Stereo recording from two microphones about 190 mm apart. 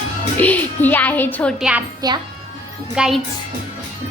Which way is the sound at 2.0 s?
20° right (ahead or behind).